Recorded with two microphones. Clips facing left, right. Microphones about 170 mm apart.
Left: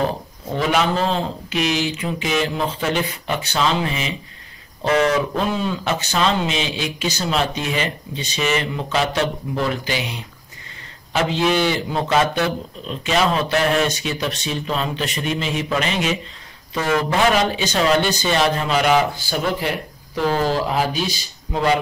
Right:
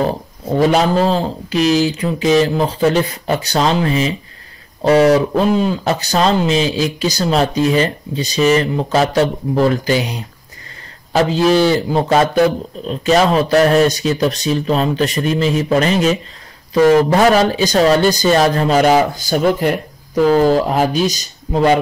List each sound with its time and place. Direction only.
0.6 s speech: 40° right (ahead or behind)